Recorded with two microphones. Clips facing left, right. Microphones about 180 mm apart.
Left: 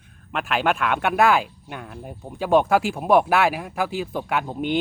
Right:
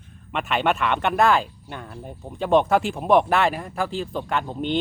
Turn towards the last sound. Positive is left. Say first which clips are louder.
# left 1 dB
turn(degrees=10)  # may be behind; listen again after turning